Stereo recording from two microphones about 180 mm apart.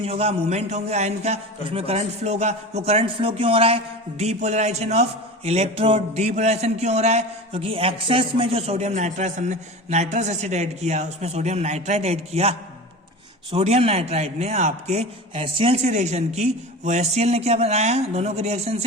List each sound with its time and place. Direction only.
0.0 s speech: 35° right (ahead or behind)